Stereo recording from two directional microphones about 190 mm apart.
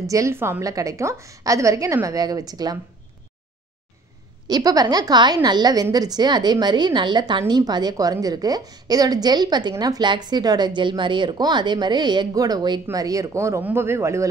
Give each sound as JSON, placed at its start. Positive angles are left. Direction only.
{"t": 0.0, "sound": "a woman's voice", "side_deg": -15}
{"t": 4.5, "sound": "a woman's voice", "side_deg": -20}